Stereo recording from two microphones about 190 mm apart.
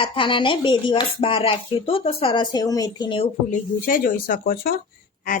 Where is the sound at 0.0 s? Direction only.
25° left (ahead or behind).